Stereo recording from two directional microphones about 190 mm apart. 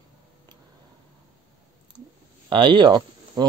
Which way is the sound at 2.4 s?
25° right (ahead or behind).